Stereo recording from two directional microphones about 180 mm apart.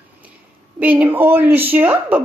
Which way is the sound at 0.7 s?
10° right (ahead or behind).